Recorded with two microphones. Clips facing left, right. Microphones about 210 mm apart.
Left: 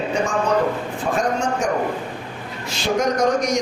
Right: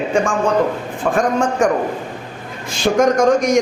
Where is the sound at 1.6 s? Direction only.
50° right (ahead or behind).